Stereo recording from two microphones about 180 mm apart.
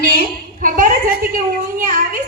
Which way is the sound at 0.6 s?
50° right (ahead or behind).